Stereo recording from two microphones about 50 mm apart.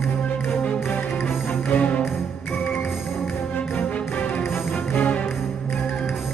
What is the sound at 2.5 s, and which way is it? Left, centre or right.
Music, left.